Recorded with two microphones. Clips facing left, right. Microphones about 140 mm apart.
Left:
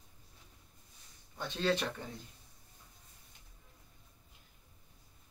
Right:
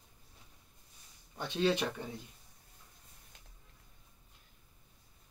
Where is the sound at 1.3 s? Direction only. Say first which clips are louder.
Right 2 dB; 15° right (ahead or behind).